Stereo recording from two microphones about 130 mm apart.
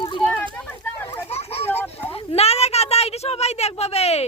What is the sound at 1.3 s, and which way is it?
Speech, 50° left (ahead or behind).